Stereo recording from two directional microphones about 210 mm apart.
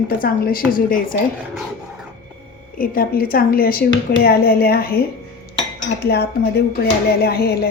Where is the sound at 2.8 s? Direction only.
45° left (ahead or behind).